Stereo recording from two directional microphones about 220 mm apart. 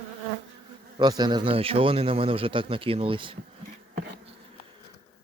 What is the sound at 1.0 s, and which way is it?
Speech, 20° right (ahead or behind).